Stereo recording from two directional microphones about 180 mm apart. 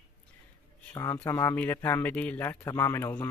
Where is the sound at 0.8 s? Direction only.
15° left (ahead or behind).